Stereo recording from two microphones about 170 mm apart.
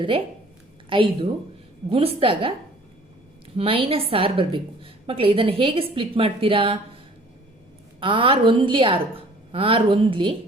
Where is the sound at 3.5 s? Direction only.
30° right (ahead or behind).